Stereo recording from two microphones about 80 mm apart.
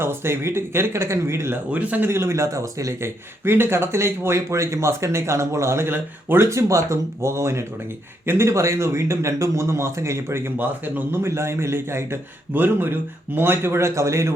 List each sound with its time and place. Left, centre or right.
0.0 s speech: right
1.7 s a man's voice: right
2.0 s speech: right